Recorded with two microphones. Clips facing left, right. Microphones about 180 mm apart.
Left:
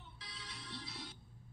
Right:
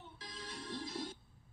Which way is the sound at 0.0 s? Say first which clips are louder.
Right 5 dB; 45° right (ahead or behind).